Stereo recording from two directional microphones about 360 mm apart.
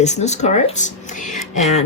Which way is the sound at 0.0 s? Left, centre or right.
Centre.